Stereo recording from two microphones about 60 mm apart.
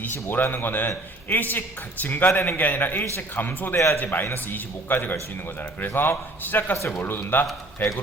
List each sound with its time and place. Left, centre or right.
0.0 s a man's voice: left
6.7 s speech: left
7.0 s a man's voice: left